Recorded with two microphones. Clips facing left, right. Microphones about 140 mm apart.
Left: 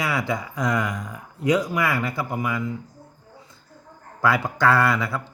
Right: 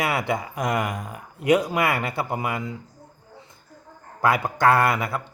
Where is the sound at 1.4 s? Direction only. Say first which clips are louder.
Right 1 dB; 60° right (ahead or behind).